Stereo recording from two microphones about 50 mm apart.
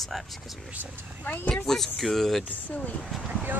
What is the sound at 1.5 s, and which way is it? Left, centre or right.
Speech, centre.